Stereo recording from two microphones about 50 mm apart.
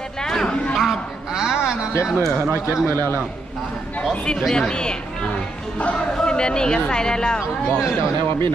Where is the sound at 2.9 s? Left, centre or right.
Right.